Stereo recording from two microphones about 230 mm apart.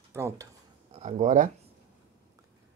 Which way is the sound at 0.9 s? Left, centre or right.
Right.